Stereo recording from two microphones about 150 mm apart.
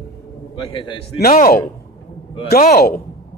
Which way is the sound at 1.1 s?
75° left (ahead or behind).